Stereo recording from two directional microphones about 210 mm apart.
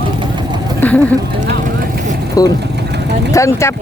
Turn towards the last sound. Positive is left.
turn(degrees=15)  # may be behind; listen again after turning